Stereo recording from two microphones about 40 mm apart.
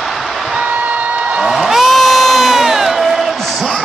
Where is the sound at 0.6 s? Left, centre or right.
Right.